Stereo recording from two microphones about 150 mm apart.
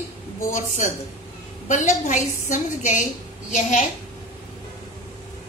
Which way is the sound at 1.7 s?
55° left (ahead or behind).